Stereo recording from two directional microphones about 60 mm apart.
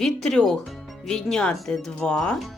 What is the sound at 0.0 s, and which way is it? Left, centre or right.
Speech, centre.